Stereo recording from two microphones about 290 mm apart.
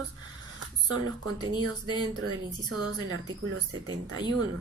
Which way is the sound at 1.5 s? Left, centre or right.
Centre.